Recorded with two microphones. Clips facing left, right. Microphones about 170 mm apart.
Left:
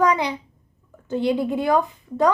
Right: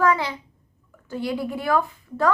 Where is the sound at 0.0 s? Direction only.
20° left (ahead or behind).